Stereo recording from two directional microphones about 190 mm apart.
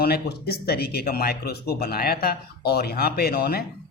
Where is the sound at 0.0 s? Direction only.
55° left (ahead or behind).